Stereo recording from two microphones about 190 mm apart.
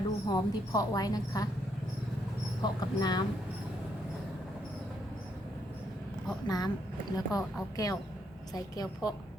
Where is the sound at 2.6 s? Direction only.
20° left (ahead or behind).